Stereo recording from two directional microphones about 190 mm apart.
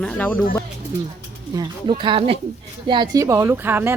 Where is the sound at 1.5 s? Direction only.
25° right (ahead or behind).